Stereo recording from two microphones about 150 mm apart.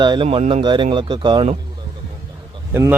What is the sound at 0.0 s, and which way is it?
Speech, 30° right (ahead or behind).